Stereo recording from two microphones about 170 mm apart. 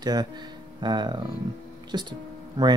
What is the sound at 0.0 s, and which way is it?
Speech, 25° right (ahead or behind).